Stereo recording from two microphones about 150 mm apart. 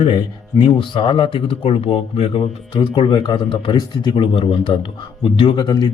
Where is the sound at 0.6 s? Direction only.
35° left (ahead or behind).